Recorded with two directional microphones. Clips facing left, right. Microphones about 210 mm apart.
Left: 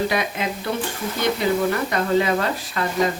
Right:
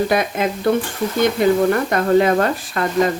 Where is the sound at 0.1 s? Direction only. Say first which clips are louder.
Right 5 dB; 50° right (ahead or behind).